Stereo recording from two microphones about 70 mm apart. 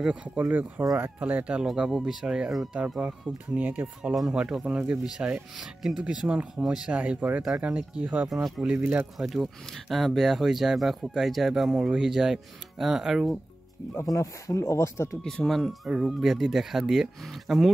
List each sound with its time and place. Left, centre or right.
0.0 s speech: centre
0.5 s speech: right
1.6 s speech: centre
3.0 s speech: right
4.3 s speech: centre
6.9 s speech: right
8.3 s speech: centre
8.6 s speech: right
9.2 s speech: centre
14.0 s speech: left
15.4 s speech: centre